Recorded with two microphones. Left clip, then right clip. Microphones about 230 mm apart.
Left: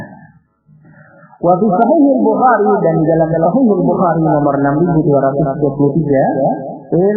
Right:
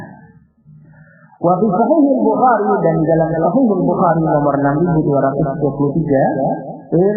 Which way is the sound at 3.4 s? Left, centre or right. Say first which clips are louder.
Left 2 dB; left.